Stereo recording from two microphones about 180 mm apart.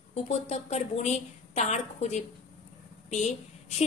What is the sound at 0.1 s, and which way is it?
A woman's voice, 35° left (ahead or behind).